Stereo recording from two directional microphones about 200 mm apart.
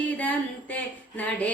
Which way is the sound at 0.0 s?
10° left (ahead or behind).